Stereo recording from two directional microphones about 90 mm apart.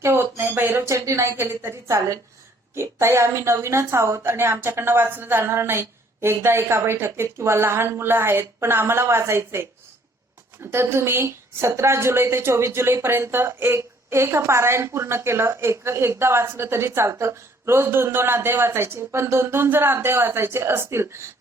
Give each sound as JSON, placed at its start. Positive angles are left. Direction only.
{"t": 0.0, "sound": "a woman's voice", "side_deg": -25}